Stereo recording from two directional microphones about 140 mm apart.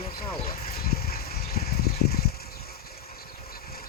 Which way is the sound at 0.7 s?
90° left.